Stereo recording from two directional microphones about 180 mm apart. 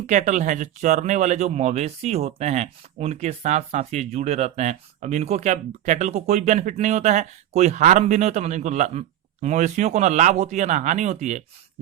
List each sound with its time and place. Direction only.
0.1 s speech: 40° right (ahead or behind)